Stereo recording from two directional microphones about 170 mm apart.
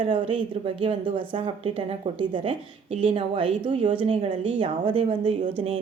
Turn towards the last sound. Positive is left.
turn(degrees=-30)  # may be behind; listen again after turning